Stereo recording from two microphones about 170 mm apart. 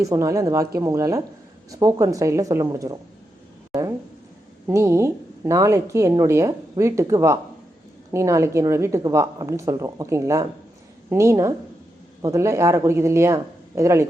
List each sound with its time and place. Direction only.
0.0 s speech: 20° right (ahead or behind)
4.6 s a woman's voice: 15° right (ahead or behind)